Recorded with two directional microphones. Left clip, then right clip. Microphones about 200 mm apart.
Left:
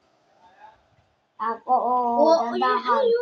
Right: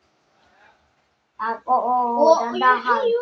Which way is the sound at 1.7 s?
10° right (ahead or behind).